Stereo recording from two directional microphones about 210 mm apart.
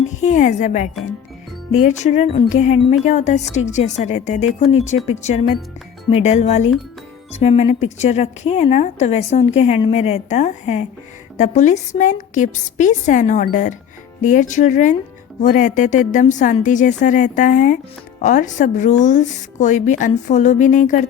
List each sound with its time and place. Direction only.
0.2 s speech: 35° left (ahead or behind)